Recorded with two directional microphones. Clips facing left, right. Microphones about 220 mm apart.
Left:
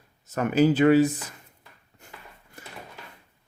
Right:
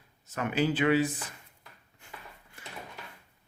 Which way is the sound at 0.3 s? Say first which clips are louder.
Left 8 dB; 40° left (ahead or behind).